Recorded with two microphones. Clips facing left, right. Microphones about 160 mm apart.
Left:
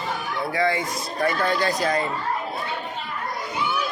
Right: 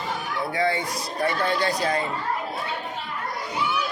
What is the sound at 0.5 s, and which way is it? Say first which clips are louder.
Speech: left 1 dB; 35° right (ahead or behind).